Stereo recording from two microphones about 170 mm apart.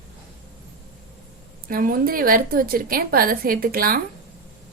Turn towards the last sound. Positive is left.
turn(degrees=-60)  # may be behind; listen again after turning